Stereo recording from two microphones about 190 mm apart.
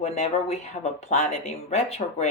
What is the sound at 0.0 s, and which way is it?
Speech, 35° left (ahead or behind).